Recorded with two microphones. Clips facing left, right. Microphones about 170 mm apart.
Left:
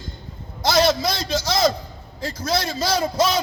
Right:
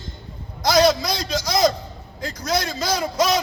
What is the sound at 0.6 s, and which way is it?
A man's voice, 25° left (ahead or behind).